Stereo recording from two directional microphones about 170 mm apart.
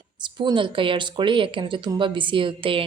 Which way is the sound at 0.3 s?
30° right (ahead or behind).